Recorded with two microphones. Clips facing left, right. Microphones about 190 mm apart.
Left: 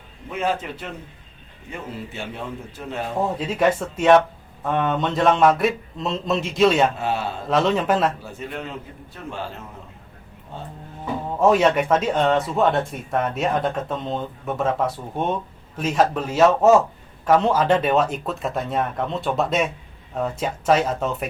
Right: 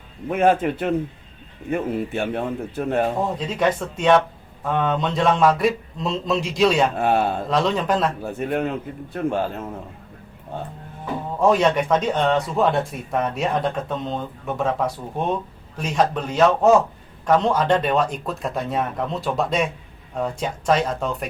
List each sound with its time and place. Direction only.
0.3 s a man's voice: 55° right (ahead or behind)
3.3 s speech: 5° left (ahead or behind)
6.9 s a man's voice: 55° right (ahead or behind)
7.5 s speech: 5° left (ahead or behind)
8.2 s a man's voice: 55° right (ahead or behind)
11.3 s speech: 5° left (ahead or behind)